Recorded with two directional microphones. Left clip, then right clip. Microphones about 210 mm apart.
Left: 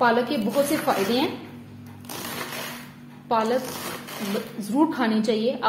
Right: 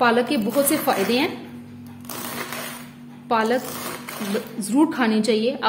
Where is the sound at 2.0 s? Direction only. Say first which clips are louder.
Right 2 dB; centre (ahead or behind).